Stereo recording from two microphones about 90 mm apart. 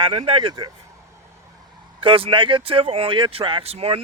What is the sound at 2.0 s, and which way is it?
Speech, 80° right.